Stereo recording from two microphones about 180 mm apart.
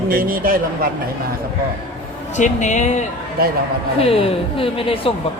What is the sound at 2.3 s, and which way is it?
Speech, 40° left (ahead or behind).